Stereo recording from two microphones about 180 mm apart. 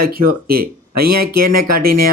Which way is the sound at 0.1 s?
55° right (ahead or behind).